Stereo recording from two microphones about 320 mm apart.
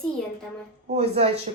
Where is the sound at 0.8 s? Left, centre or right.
Centre.